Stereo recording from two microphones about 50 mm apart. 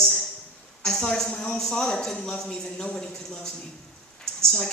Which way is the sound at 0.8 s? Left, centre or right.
Centre.